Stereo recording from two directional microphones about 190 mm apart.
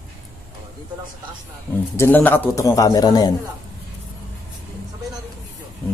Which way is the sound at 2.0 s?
10° left (ahead or behind).